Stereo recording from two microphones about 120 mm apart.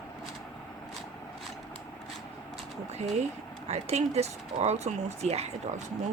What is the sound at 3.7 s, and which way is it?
Speech, 60° right (ahead or behind).